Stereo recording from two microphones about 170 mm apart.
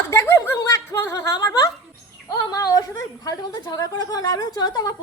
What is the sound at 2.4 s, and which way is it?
A woman's voice, 20° left (ahead or behind).